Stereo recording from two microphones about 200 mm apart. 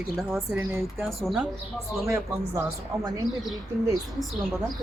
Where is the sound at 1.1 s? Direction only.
Centre (ahead or behind).